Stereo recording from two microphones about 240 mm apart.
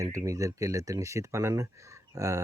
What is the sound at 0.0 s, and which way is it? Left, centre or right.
Speech, centre.